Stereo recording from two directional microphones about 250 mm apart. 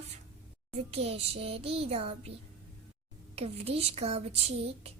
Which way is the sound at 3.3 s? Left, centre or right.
Right.